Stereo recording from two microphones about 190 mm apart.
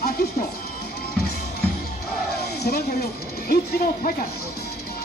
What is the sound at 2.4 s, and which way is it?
Music, 55° left (ahead or behind).